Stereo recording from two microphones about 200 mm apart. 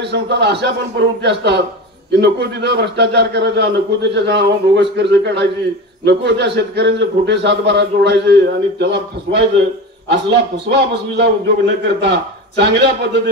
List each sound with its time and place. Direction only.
0.0 s a man's voice: 60° right (ahead or behind)